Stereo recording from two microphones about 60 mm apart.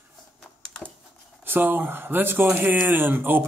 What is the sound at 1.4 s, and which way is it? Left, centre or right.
Speech, right.